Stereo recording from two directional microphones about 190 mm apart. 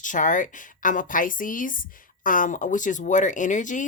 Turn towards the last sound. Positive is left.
turn(degrees=40)  # may be behind; listen again after turning